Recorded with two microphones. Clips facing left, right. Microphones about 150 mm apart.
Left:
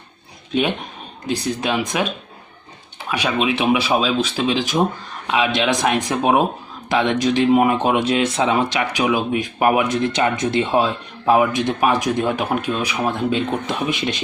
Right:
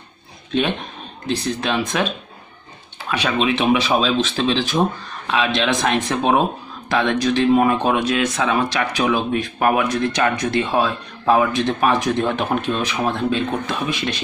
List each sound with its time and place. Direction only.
0.5 s speech: 15° left (ahead or behind)